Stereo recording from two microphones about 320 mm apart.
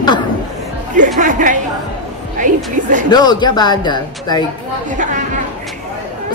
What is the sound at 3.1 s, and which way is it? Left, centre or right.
Speech, centre.